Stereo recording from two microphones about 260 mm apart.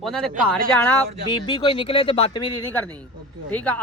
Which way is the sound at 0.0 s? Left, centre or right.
Centre.